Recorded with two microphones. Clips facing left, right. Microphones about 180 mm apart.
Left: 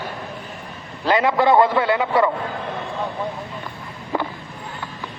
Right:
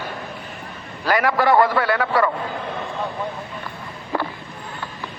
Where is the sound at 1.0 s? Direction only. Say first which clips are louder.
Left 1 dB; 20° left (ahead or behind).